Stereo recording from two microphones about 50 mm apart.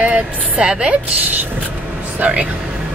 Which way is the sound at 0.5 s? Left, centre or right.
Right.